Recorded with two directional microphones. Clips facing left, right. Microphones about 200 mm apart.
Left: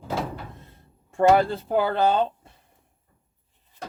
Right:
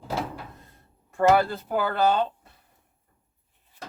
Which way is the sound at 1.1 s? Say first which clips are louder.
Left 2 dB; 25° left (ahead or behind).